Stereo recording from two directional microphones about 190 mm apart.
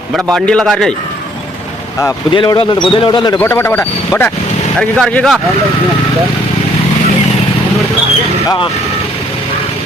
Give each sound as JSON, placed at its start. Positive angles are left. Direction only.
{"t": 0.3, "sound": "a man's voice", "side_deg": 5}
{"t": 2.0, "sound": "speech", "side_deg": 20}
{"t": 3.3, "sound": "a man's voice", "side_deg": 15}
{"t": 8.4, "sound": "speech", "side_deg": 25}